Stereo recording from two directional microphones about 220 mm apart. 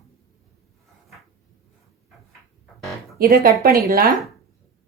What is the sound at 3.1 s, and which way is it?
Speech, 45° right (ahead or behind).